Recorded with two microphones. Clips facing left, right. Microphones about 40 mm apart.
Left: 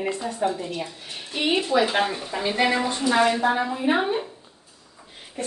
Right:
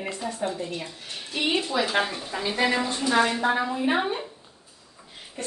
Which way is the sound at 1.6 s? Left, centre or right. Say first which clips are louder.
Left 5 dB; centre.